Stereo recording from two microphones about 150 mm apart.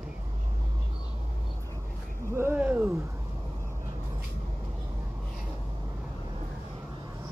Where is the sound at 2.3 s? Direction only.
10° right (ahead or behind).